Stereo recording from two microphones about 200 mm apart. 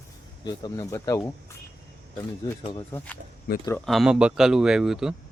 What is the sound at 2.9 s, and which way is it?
Speech, 10° left (ahead or behind).